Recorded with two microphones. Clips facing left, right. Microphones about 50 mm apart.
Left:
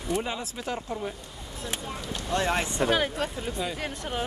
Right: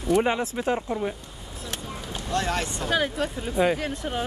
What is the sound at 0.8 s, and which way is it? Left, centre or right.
Speech, centre.